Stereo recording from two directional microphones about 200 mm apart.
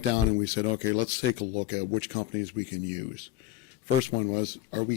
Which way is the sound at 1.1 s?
5° right (ahead or behind).